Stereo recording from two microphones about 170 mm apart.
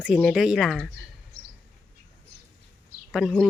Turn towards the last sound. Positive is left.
turn(degrees=0)  # may be behind; listen again after turning